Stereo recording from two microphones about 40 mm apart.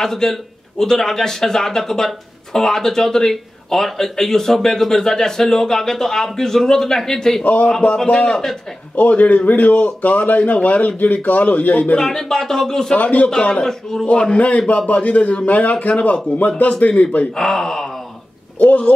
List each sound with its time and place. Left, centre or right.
0.0 s a man's voice: centre
8.9 s speech: left
12.0 s a man's voice: centre
12.9 s speech: left
13.3 s a man's voice: left
13.7 s a man's voice: centre
14.0 s speech: left
17.4 s a man's voice: centre
18.9 s speech: left